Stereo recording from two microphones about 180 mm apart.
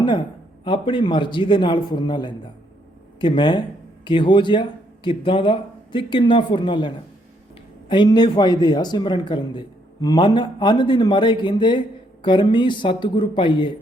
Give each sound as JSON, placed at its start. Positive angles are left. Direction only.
{"t": 0.0, "sound": "a man's voice", "side_deg": 25}